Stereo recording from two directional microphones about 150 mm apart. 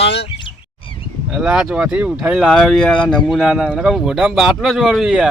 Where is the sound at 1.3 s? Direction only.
5° right (ahead or behind).